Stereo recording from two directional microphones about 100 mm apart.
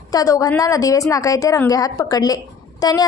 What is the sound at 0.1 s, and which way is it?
A woman's voice, 35° left (ahead or behind).